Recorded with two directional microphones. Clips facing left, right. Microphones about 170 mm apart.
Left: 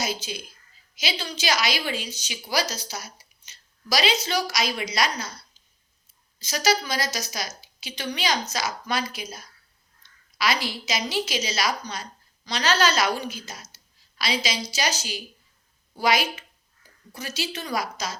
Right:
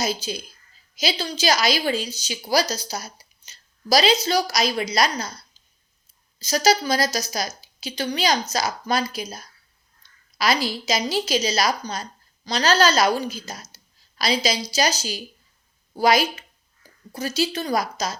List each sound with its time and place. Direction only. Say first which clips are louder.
0.0 s a woman's voice: right 4 dB; 35° right (ahead or behind)
6.4 s a woman's voice: right 5 dB; 35° right (ahead or behind)